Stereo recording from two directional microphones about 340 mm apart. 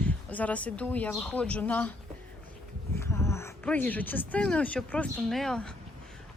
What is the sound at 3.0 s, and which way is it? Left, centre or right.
Speech, centre.